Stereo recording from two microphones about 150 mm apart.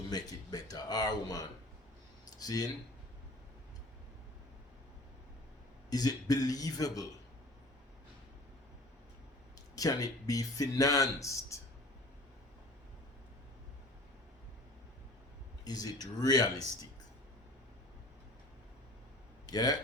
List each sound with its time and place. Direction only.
0.1 s speech: 25° left (ahead or behind)
5.9 s speech: 25° left (ahead or behind)
9.7 s speech: 25° left (ahead or behind)
15.6 s speech: 25° left (ahead or behind)
19.5 s speech: 25° left (ahead or behind)